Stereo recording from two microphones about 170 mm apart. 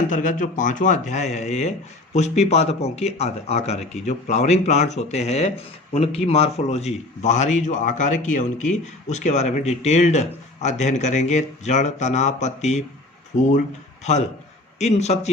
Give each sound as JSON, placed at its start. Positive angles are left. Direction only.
{"t": 0.1, "sound": "speech", "side_deg": 50}